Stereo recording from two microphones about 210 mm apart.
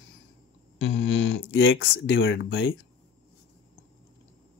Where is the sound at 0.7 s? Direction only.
65° left (ahead or behind).